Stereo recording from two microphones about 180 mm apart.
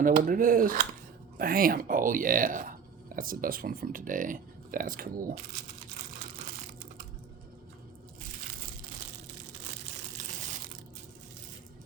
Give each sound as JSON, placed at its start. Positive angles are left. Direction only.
{"t": 0.0, "sound": "speech", "side_deg": -50}
{"t": 10.2, "sound": "crushing", "side_deg": -45}